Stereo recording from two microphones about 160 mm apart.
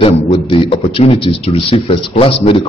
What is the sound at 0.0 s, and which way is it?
A man's voice, 35° left (ahead or behind).